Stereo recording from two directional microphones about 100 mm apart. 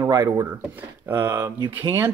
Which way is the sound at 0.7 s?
25° right (ahead or behind).